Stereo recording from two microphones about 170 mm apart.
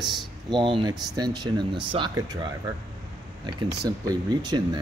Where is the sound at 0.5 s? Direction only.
30° right (ahead or behind).